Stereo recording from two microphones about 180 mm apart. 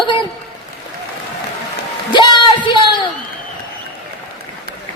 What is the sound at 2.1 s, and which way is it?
Music, 25° left (ahead or behind).